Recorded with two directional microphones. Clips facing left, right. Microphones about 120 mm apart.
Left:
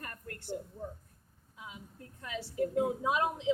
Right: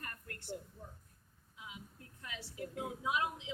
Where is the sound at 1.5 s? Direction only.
35° left (ahead or behind).